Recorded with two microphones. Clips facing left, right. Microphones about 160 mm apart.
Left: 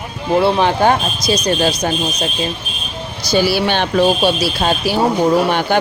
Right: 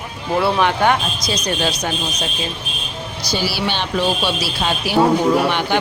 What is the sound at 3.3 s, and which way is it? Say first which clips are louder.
Speech: left 7 dB; 50° left (ahead or behind).